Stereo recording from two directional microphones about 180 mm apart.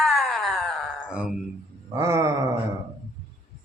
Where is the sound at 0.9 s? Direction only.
5° right (ahead or behind).